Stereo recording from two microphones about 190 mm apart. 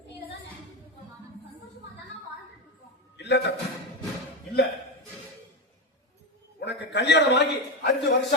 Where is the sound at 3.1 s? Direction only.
65° left (ahead or behind).